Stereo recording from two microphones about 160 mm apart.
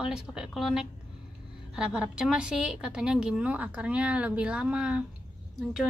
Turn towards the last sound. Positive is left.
turn(degrees=0)  # may be behind; listen again after turning